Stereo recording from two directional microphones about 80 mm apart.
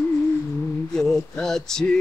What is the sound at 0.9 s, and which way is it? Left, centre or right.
Speech, centre.